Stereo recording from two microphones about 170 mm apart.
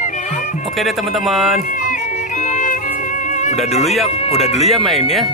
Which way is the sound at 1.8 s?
45° left (ahead or behind).